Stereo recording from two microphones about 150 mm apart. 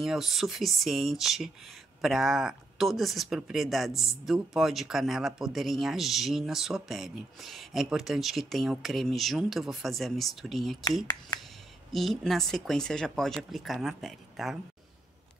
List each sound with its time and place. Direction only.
0.0 s speech: centre (ahead or behind)
3.9 s speech: 20° left (ahead or behind)
4.3 s speech: centre (ahead or behind)
11.9 s speech: centre (ahead or behind)